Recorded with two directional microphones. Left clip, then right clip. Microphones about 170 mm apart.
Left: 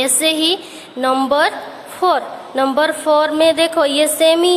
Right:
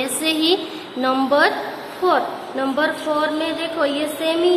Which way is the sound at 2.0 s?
60° left (ahead or behind).